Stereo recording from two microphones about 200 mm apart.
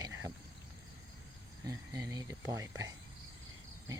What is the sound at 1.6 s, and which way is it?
Speech, 15° right (ahead or behind).